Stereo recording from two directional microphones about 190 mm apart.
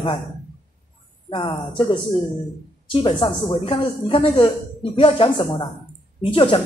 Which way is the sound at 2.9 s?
25° left (ahead or behind).